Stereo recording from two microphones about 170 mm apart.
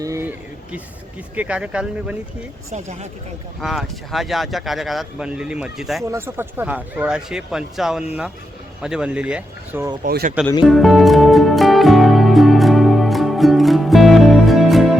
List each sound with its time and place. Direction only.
0.0 s a sound: 15° right (ahead or behind)
1.4 s speech: 5° right (ahead or behind)
3.6 s speech: centre (ahead or behind)
6.1 s speech: 15° right (ahead or behind)
10.0 s speech: 60° right (ahead or behind)
10.7 s music: centre (ahead or behind)